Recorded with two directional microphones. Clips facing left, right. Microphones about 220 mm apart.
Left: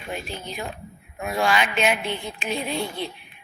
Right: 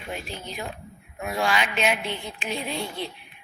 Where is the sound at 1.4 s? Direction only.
55° left (ahead or behind).